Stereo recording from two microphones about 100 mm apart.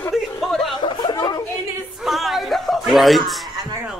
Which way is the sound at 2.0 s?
Centre (ahead or behind).